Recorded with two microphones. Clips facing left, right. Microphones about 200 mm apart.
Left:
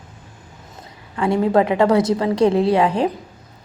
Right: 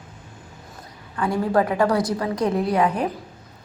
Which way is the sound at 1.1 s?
25° left (ahead or behind).